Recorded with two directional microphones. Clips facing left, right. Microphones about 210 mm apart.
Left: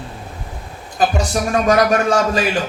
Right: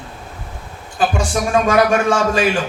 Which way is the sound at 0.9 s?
40° left (ahead or behind).